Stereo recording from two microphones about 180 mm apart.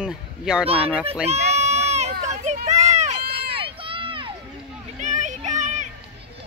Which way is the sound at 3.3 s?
30° right (ahead or behind).